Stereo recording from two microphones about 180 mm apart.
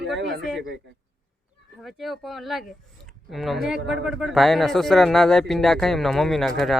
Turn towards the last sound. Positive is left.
turn(degrees=0)  # may be behind; listen again after turning